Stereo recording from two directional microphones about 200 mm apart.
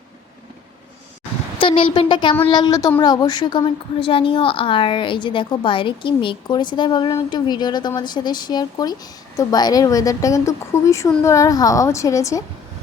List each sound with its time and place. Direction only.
1.5 s a woman's voice: 25° left (ahead or behind)